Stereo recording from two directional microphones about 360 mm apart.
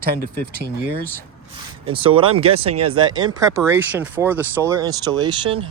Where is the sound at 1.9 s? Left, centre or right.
Centre.